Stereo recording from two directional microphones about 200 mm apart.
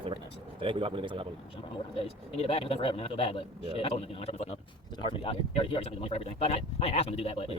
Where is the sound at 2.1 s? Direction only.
30° left (ahead or behind).